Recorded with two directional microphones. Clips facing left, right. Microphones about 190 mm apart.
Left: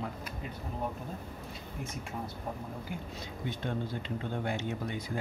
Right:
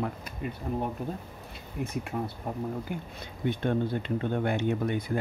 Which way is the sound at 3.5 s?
60° right (ahead or behind).